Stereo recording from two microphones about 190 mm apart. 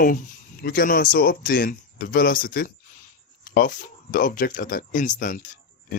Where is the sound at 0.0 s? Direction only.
45° left (ahead or behind).